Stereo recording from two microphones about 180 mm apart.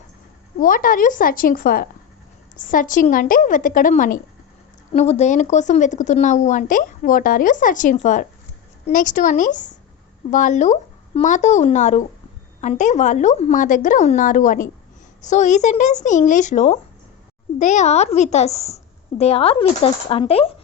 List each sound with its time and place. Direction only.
0.6 s speech: 50° left (ahead or behind)
4.9 s speech: 35° left (ahead or behind)